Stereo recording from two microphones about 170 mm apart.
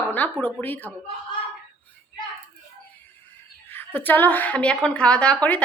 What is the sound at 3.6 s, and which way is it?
A woman's voice, 10° left (ahead or behind).